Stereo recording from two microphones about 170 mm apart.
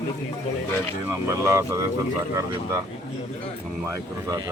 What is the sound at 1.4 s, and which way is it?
Speech, 15° right (ahead or behind).